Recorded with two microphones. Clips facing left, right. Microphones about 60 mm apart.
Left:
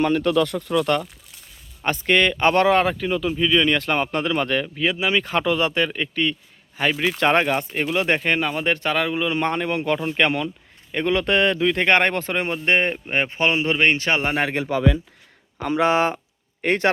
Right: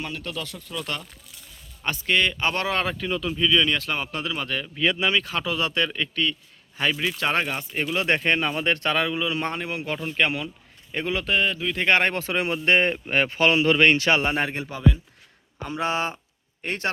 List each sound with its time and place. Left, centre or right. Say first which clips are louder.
0.0 s speech: left 13 dB; left
0.3 s speech: left 13 dB; left
1.8 s speech: left 4 dB; left
4.7 s speech: left 1 dB; centre
5.2 s speech: left 6 dB; left
7.0 s speech: left 6 dB; left
8.1 s speech: left 1 dB; centre
9.1 s speech: left 4 dB; left
9.6 s speech: left 7 dB; left
11.7 s speech: left 3 dB; left
14.4 s speech: left 5 dB; left
15.7 s speech: left 7 dB; left